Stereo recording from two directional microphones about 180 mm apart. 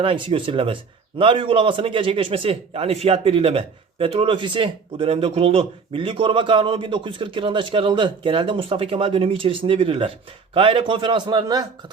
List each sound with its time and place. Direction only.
0.0 s a man's voice: 30° right (ahead or behind)